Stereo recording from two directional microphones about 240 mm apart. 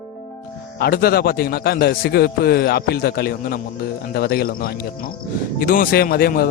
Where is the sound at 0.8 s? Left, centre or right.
Left.